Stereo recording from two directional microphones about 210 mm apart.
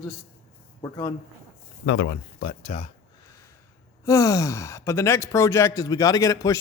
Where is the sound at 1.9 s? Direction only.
50° left (ahead or behind).